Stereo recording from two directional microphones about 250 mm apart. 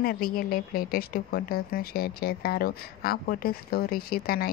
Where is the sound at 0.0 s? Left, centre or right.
Left.